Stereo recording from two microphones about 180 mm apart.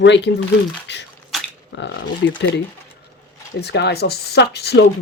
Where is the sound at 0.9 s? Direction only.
75° left (ahead or behind).